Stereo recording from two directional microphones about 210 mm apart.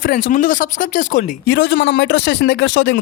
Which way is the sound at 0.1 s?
40° left (ahead or behind).